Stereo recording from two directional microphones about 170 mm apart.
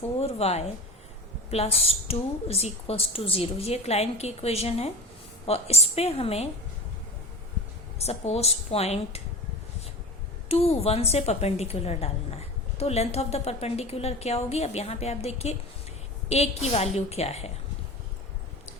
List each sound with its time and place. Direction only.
0.2 s a woman's voice: 40° left (ahead or behind)
7.9 s a woman's voice: 40° left (ahead or behind)
10.5 s a woman's voice: 35° left (ahead or behind)